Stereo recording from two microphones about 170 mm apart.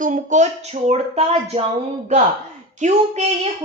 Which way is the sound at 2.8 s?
45° right (ahead or behind).